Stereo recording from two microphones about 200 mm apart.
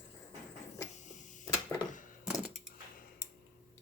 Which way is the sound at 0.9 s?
40° left (ahead or behind).